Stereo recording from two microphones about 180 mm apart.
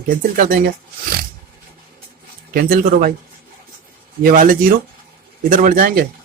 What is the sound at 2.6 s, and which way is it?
Speech, 50° right (ahead or behind).